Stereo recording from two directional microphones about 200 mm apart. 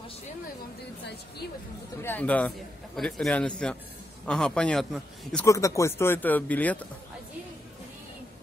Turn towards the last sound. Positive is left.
turn(degrees=10)  # may be behind; listen again after turning